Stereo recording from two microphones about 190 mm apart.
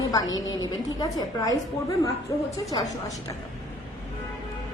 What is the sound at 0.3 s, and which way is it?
Speech, 90° left.